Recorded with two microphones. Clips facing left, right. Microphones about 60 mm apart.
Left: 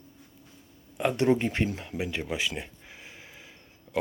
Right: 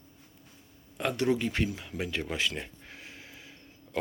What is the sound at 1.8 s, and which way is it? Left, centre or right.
Speech, centre.